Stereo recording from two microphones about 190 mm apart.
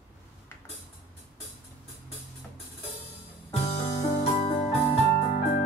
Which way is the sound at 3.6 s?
35° left (ahead or behind).